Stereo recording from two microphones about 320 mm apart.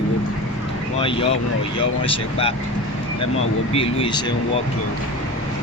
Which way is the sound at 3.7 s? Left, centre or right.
Centre.